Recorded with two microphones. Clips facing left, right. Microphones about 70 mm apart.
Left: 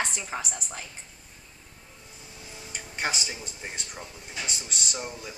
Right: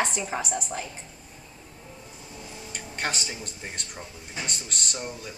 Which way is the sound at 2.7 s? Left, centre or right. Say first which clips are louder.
Even; centre.